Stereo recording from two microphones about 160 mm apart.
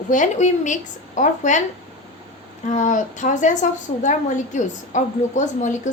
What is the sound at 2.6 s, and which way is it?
A woman's voice, 50° left (ahead or behind).